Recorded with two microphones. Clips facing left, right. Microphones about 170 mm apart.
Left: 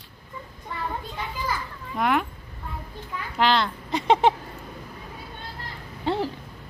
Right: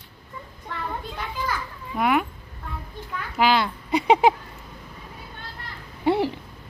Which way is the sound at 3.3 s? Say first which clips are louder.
Right 1 dB; 5° right (ahead or behind).